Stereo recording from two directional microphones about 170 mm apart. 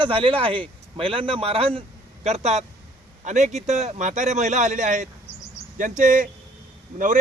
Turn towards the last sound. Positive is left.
turn(degrees=-50)  # may be behind; listen again after turning